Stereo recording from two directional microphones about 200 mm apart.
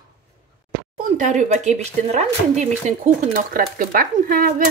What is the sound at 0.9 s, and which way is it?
Speech, 40° right (ahead or behind).